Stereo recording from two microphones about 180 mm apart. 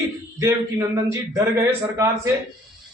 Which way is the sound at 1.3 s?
15° right (ahead or behind).